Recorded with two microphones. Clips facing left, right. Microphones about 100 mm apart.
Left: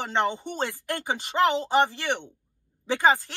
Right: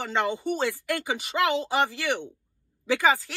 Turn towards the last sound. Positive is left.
turn(degrees=25)  # may be behind; listen again after turning